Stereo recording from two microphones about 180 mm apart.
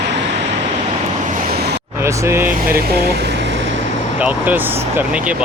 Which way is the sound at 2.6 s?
55° right (ahead or behind).